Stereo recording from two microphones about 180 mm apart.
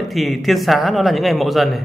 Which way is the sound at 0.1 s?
Centre (ahead or behind).